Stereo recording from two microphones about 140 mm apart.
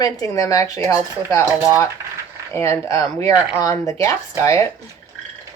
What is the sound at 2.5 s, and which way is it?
Speech, 20° left (ahead or behind).